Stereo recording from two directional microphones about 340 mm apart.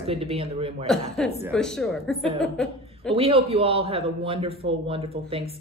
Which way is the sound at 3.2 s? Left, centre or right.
Centre.